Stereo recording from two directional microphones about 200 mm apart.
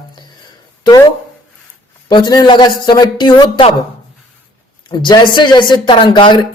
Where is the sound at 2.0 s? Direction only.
20° left (ahead or behind).